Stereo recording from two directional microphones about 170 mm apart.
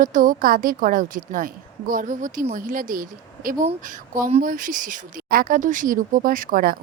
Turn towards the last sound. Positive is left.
turn(degrees=-55)  # may be behind; listen again after turning